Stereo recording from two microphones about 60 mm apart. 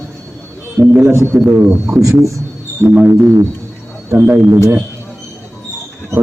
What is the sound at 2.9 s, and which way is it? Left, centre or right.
Speech, right.